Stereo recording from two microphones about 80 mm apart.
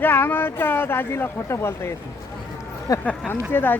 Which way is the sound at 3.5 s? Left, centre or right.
Left.